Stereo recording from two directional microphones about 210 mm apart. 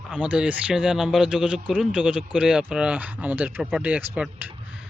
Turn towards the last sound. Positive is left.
turn(degrees=-5)  # may be behind; listen again after turning